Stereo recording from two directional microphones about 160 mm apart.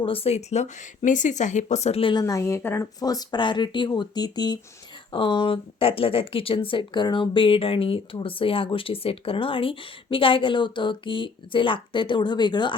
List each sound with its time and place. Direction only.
0.0 s speech: 35° left (ahead or behind)
2.2 s speech: 20° left (ahead or behind)